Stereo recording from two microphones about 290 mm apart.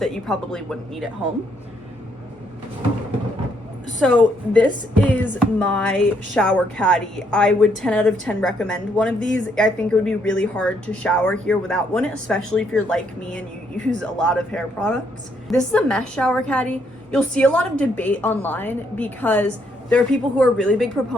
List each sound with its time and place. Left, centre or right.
0.0 s a woman's voice: centre
4.0 s a woman's voice: centre